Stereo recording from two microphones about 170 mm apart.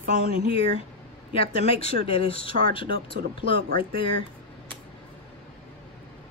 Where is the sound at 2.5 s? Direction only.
55° right (ahead or behind).